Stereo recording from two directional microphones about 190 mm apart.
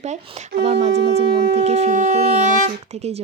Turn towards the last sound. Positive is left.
turn(degrees=-35)  # may be behind; listen again after turning